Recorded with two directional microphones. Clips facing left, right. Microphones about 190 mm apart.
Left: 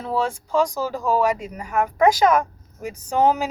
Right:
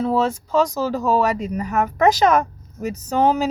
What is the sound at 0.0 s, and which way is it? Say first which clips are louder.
Speech: right 5 dB; 10° left (ahead or behind).